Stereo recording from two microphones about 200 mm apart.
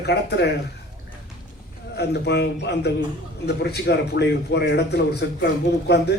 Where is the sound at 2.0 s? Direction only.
60° left (ahead or behind).